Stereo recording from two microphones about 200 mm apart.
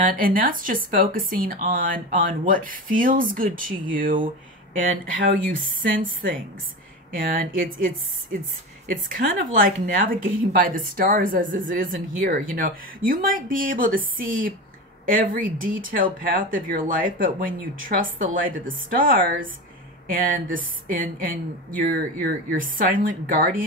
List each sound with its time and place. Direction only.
0.0 s speech: 45° right (ahead or behind)
5.5 s speech: 75° right (ahead or behind)
7.2 s speech: 45° right (ahead or behind)
8.9 s speech: 45° right (ahead or behind)